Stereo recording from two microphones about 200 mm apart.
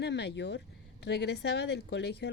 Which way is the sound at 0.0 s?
55° left (ahead or behind).